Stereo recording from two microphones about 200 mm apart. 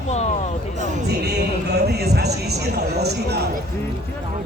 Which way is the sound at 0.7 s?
35° right (ahead or behind).